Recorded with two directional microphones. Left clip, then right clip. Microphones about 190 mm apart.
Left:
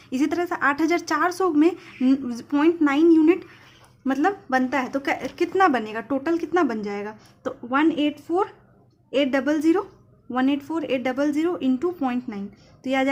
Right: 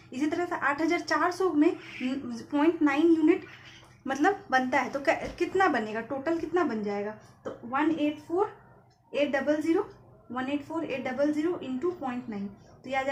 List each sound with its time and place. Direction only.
0.1 s a woman's voice: 40° left (ahead or behind)
9.1 s a woman's voice: 40° left (ahead or behind)